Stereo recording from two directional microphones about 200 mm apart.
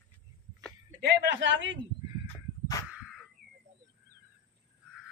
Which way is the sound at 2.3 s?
15° left (ahead or behind).